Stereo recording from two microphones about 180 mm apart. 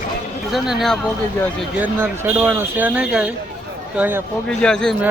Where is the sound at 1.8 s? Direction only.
10° right (ahead or behind).